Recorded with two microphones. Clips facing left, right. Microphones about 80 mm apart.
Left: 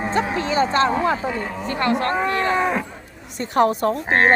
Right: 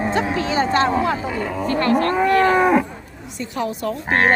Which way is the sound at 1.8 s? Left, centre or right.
Left.